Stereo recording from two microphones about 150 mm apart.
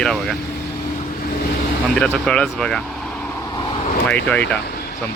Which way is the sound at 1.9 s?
5° left (ahead or behind).